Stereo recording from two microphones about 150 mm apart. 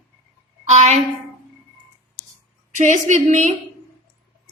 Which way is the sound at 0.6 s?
50° right (ahead or behind).